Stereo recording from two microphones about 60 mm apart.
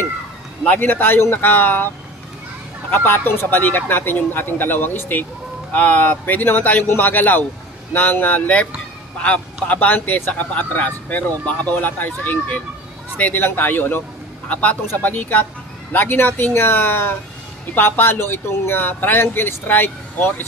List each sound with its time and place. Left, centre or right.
0.7 s speech: left
2.9 s a man's voice: left
14.5 s a man's voice: left